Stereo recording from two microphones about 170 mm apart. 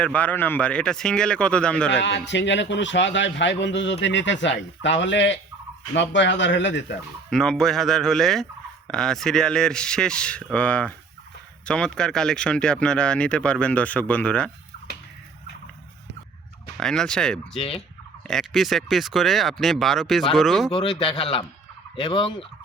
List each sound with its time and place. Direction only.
0.0 s speech: 10° left (ahead or behind)
1.9 s a man's voice: 90° left
7.3 s speech: 5° left (ahead or behind)
16.7 s speech: 5° left (ahead or behind)
17.6 s a man's voice: 35° left (ahead or behind)
18.3 s speech: centre (ahead or behind)
20.7 s a man's voice: 30° left (ahead or behind)
21.9 s fowl: 30° left (ahead or behind)